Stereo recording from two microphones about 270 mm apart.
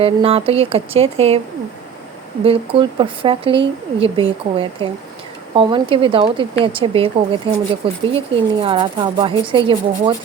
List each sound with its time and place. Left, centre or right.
0.0 s speech: right
2.4 s speech: right